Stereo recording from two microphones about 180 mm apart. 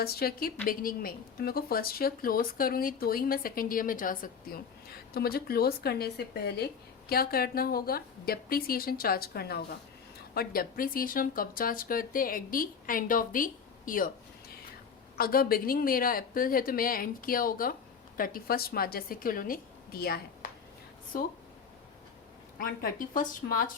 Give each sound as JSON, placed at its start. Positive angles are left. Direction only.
{"t": 0.0, "sound": "a woman's voice", "side_deg": 60}
{"t": 15.2, "sound": "a woman's voice", "side_deg": 55}
{"t": 22.5, "sound": "speech", "side_deg": 50}